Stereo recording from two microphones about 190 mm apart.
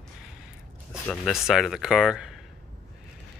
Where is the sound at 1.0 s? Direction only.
Centre (ahead or behind).